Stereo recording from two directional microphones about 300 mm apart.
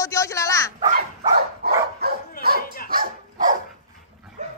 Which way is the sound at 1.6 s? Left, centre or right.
Right.